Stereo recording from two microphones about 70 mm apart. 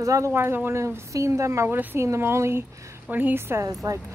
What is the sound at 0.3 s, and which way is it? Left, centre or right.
A woman's voice, right.